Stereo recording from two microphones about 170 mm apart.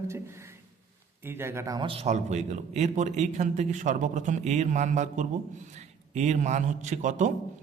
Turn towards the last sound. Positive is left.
turn(degrees=-45)  # may be behind; listen again after turning